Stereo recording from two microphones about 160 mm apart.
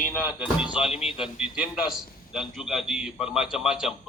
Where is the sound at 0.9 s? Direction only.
40° left (ahead or behind).